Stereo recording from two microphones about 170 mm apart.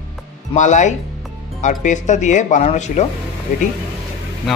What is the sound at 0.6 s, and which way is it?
Speech, 45° left (ahead or behind).